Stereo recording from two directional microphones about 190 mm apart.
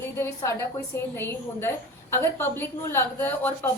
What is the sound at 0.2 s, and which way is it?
A woman's voice, 15° left (ahead or behind).